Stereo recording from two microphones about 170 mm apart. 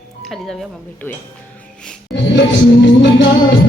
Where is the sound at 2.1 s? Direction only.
90° left.